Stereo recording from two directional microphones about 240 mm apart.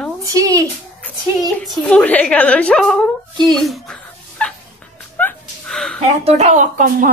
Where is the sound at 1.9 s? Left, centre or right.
Centre.